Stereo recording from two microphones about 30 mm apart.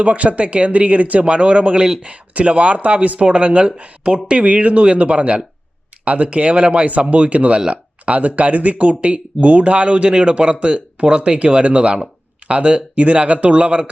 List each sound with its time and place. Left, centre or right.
0.0 s speech: right
1.2 s speech: right
3.2 s speech: right
4.4 s speech: right